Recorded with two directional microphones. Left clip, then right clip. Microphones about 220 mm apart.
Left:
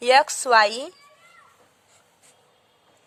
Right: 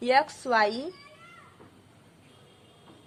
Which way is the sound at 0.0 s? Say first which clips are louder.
Left 6 dB; 50° left (ahead or behind).